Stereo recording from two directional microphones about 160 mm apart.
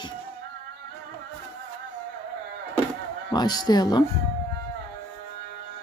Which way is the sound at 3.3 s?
25° left (ahead or behind).